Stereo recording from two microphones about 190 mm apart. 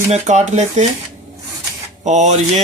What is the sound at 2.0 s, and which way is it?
Speech, 40° right (ahead or behind).